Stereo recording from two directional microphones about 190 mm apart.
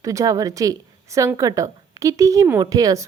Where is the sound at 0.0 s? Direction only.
15° right (ahead or behind).